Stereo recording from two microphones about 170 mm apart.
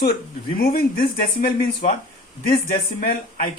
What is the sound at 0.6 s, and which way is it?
Speech, 60° left (ahead or behind).